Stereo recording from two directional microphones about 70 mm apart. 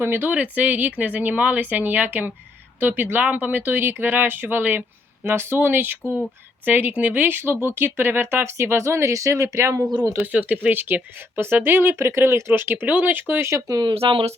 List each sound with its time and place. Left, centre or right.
0.0 s speech: right
10.3 s speech: centre
13.7 s speech: right